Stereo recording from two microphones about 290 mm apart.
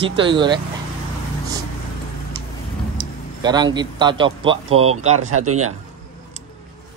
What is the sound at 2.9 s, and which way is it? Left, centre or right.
A man's voice, centre.